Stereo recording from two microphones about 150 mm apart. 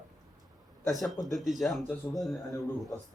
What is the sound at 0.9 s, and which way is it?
Speech, centre (ahead or behind).